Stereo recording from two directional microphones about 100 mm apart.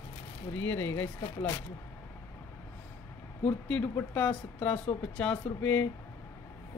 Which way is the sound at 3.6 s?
15° left (ahead or behind).